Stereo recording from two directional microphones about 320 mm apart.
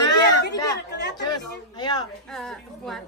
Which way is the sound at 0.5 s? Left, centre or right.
Centre.